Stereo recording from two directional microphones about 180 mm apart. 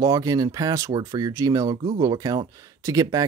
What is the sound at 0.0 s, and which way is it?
Speech, 20° right (ahead or behind).